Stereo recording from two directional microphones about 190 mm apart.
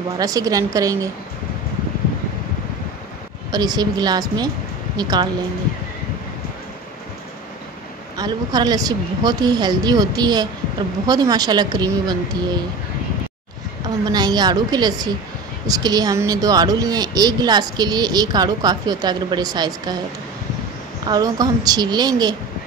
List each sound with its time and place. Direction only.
0.2 s speech: 20° right (ahead or behind)
3.5 s speech: 20° right (ahead or behind)
8.2 s speech: 20° right (ahead or behind)
13.8 s speech: 20° right (ahead or behind)
21.1 s speech: 20° right (ahead or behind)